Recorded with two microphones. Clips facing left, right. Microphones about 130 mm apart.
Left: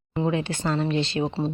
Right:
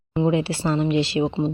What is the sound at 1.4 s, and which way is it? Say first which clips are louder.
Speech: right 3 dB; 5° right (ahead or behind).